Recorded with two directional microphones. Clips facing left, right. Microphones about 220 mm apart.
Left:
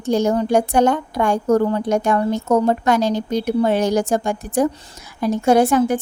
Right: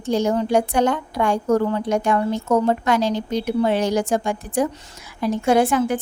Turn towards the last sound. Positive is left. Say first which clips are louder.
# left 3 dB
turn(degrees=40)  # may be behind; listen again after turning